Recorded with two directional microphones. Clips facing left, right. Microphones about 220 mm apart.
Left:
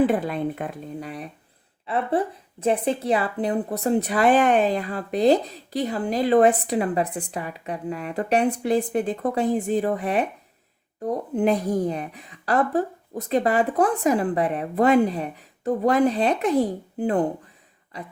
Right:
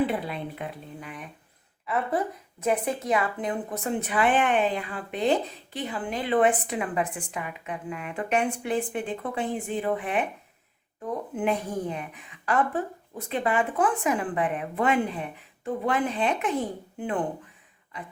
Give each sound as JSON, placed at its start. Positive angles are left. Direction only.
{"t": 0.0, "sound": "speech", "side_deg": 45}